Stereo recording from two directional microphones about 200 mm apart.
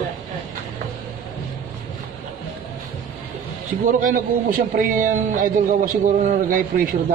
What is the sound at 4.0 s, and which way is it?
A man's voice, 40° right (ahead or behind).